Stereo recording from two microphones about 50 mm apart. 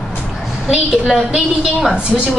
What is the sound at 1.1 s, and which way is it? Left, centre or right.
Speech, centre.